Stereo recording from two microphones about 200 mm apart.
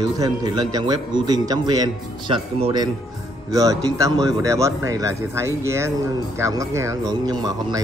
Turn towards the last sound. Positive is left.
turn(degrees=-20)  # may be behind; listen again after turning